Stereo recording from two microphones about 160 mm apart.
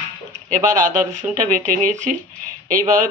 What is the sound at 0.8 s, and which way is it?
Speech, 55° right (ahead or behind).